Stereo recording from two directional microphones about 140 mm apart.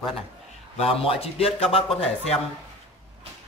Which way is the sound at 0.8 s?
45° left (ahead or behind).